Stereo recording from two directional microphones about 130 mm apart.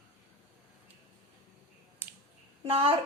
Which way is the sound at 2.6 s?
45° right (ahead or behind).